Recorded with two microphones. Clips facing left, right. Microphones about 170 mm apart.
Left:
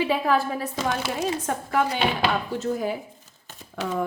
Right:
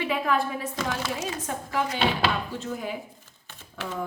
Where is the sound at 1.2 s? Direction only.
55° left (ahead or behind).